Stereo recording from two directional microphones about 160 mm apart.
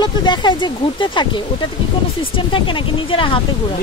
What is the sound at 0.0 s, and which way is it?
Speech, 25° left (ahead or behind).